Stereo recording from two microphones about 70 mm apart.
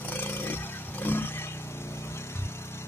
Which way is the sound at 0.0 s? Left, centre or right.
Left.